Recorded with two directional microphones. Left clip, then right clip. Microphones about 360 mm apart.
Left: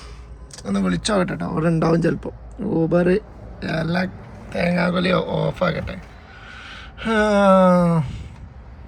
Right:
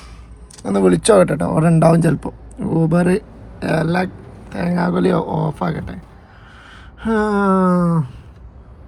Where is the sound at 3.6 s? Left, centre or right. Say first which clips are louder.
Right 5 dB; centre.